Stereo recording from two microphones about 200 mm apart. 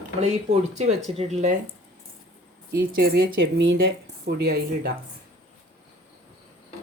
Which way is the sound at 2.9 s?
45° right (ahead or behind).